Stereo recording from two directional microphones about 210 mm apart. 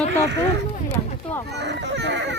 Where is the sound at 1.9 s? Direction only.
55° right (ahead or behind).